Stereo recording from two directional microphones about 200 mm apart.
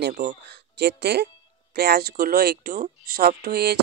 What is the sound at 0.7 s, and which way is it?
Speech, 55° right (ahead or behind).